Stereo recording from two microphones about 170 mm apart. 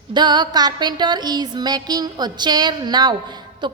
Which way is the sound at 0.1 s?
25° right (ahead or behind).